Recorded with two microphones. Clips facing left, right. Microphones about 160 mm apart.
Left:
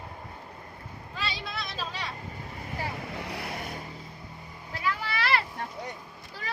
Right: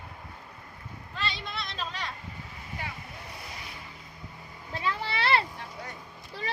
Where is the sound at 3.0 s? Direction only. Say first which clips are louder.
Left 8 dB; 90° left; by 3.8 s 55° left (ahead or behind).